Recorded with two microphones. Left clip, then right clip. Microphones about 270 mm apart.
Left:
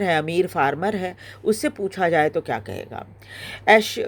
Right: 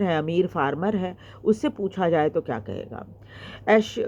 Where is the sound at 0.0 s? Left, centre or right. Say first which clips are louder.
Left 3 dB; left.